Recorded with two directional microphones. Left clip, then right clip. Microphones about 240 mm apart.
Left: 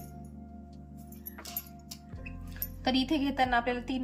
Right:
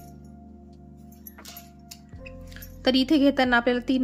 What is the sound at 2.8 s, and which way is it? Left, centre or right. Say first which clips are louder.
A woman's voice: right 9 dB; centre.